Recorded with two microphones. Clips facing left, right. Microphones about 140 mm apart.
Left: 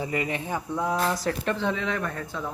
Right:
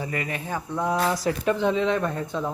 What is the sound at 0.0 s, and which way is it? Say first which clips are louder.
Speech: left 2 dB; 20° left (ahead or behind).